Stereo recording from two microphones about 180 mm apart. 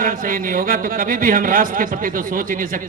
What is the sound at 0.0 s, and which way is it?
A man's voice, 50° right (ahead or behind).